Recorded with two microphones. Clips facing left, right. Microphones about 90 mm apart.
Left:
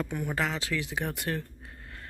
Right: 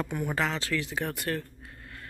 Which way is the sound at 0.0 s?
Centre (ahead or behind).